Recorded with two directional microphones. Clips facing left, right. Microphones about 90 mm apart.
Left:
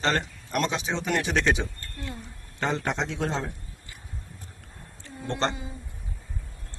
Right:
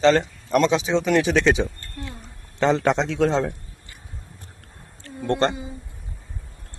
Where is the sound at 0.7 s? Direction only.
90° right.